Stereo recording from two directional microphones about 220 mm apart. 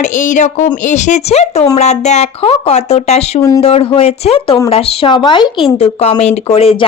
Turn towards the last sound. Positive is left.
turn(degrees=25)  # may be behind; listen again after turning